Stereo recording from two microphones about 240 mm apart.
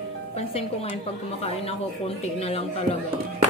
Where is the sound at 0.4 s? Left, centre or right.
Left.